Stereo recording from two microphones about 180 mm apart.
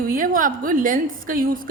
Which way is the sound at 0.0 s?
50° right (ahead or behind).